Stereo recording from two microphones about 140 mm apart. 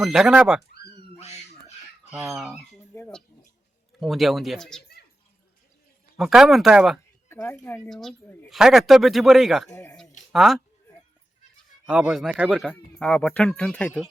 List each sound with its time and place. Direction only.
0.0 s a man's voice: 5° right (ahead or behind)
1.1 s a sound: 50° left (ahead or behind)
2.0 s speech: 10° right (ahead or behind)
2.3 s a man's voice: centre (ahead or behind)
4.0 s a man's voice: centre (ahead or behind)
6.1 s a man's voice: 5° right (ahead or behind)
7.3 s speech: 15° left (ahead or behind)
7.9 s a man's voice: 5° left (ahead or behind)
9.6 s speech: 20° left (ahead or behind)
10.3 s a man's voice: centre (ahead or behind)
11.9 s a man's voice: 10° right (ahead or behind); by 14.0 s 10° left (ahead or behind)